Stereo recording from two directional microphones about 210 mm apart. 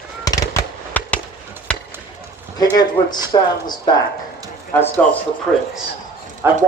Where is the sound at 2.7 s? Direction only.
20° left (ahead or behind).